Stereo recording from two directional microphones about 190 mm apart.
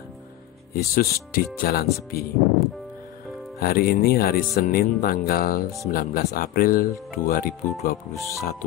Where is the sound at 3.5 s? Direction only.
50° left (ahead or behind).